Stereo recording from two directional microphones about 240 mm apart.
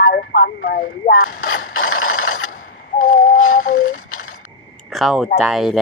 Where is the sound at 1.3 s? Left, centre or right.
Left.